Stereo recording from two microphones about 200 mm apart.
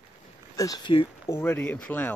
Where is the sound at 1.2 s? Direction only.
10° left (ahead or behind).